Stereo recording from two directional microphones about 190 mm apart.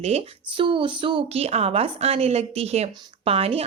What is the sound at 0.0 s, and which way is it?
Speech, 30° right (ahead or behind).